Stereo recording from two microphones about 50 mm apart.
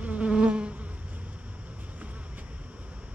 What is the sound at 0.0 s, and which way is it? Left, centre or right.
Insect, right.